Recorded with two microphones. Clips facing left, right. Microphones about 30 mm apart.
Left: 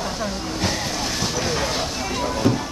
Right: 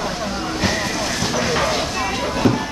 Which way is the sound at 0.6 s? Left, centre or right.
Right.